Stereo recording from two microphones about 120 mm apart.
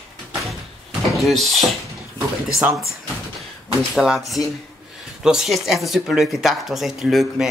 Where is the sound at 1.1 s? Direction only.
Centre (ahead or behind).